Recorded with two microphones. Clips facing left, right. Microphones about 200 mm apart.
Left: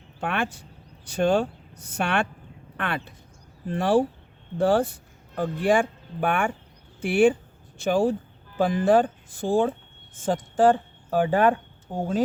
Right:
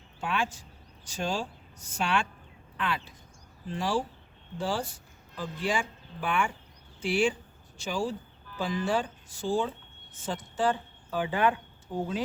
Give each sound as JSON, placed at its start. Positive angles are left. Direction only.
{"t": 0.2, "sound": "speech", "side_deg": 60}